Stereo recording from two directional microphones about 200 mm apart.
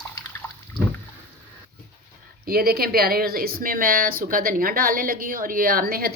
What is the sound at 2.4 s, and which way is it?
Speech, 50° right (ahead or behind).